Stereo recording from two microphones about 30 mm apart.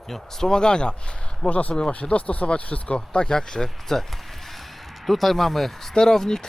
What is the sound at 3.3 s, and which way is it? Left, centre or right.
Speech, left.